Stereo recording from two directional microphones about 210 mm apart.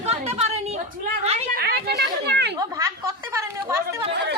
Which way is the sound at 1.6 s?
50° right (ahead or behind).